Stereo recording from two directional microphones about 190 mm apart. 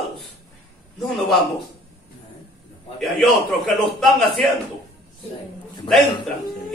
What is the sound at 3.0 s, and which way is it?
Speech, centre (ahead or behind).